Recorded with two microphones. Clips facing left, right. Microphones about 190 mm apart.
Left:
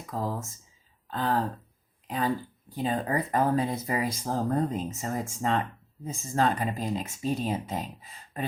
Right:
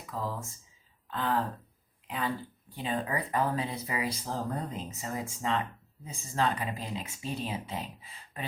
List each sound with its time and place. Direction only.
0.0 s speech: 45° left (ahead or behind)